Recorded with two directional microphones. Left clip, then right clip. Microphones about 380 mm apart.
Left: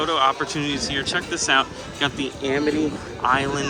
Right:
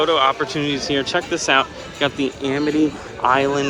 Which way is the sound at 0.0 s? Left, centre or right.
Centre.